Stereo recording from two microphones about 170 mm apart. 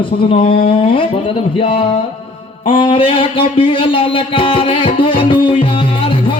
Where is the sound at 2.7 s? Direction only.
30° left (ahead or behind).